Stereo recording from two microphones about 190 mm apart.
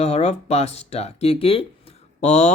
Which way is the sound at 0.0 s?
35° left (ahead or behind).